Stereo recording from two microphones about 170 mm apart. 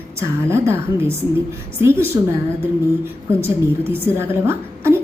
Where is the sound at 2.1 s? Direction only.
15° right (ahead or behind).